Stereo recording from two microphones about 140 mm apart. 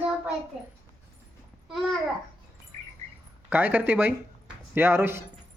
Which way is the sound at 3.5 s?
15° right (ahead or behind).